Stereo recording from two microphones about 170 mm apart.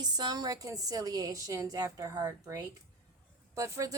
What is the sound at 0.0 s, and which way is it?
A woman's voice, 25° right (ahead or behind).